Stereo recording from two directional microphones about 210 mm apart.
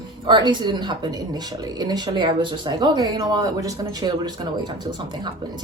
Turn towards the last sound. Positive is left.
turn(degrees=-20)  # may be behind; listen again after turning